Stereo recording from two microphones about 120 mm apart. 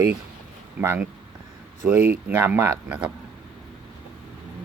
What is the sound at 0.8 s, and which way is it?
Speech, 20° right (ahead or behind).